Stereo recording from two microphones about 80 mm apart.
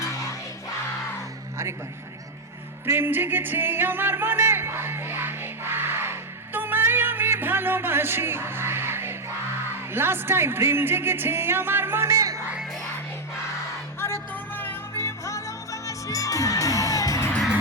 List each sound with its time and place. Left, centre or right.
0.0 s music: left
2.8 s music: right
9.9 s speech: right
12.1 s music: right
14.0 s music: left